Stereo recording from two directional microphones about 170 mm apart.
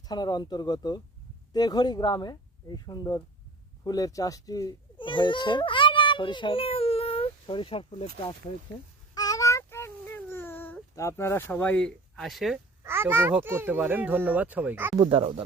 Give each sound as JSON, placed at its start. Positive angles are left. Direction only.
{"t": 0.1, "sound": "a child's voice", "side_deg": 25}
{"t": 9.1, "sound": "a sound", "side_deg": 20}
{"t": 12.8, "sound": "a child's voice", "side_deg": -15}
{"t": 15.0, "sound": "speech", "side_deg": -35}